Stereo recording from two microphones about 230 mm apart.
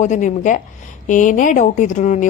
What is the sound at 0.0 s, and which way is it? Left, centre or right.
Speech, left.